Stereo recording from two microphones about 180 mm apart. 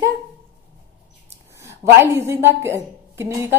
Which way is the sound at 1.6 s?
15° right (ahead or behind).